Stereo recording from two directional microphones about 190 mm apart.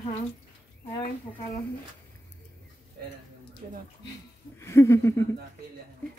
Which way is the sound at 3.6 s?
45° right (ahead or behind).